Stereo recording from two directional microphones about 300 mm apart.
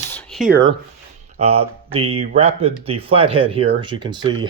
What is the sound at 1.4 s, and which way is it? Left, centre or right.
A man's voice, centre.